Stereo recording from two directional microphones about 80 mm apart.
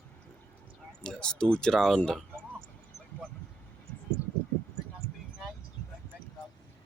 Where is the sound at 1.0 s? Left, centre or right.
Centre.